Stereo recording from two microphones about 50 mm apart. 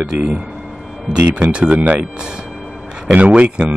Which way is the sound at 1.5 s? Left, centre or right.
Right.